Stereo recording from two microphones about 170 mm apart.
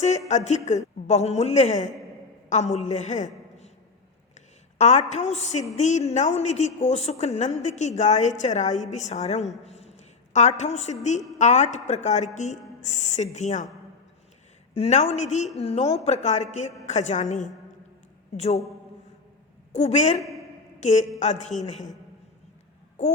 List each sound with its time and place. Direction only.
0.0 s a woman's voice: 40° left (ahead or behind)
4.8 s a woman's voice: 40° left (ahead or behind)
9.6 s a sound: 40° left (ahead or behind)
10.6 s a woman's voice: 40° left (ahead or behind)
14.7 s a woman's voice: 40° left (ahead or behind)
19.7 s a woman's voice: 40° left (ahead or behind)